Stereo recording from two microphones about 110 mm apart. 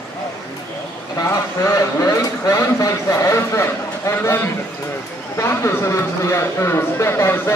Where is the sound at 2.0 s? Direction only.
30° left (ahead or behind).